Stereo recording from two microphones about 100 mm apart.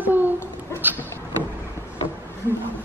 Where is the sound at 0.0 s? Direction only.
20° right (ahead or behind).